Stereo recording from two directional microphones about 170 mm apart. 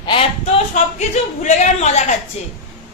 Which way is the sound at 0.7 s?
45° left (ahead or behind).